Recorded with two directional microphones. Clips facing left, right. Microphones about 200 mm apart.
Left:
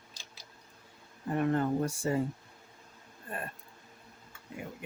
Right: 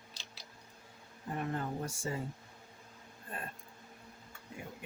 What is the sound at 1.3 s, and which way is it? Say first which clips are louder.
Speech: left 9 dB; 65° left (ahead or behind).